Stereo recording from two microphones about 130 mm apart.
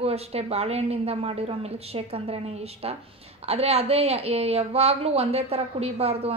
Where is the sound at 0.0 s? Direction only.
50° right (ahead or behind).